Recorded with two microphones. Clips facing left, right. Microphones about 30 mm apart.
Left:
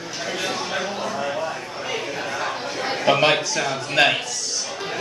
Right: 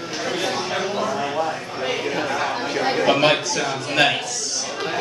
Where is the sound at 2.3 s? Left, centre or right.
Right.